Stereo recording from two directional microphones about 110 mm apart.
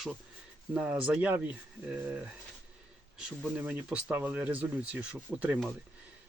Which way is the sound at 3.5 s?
15° right (ahead or behind).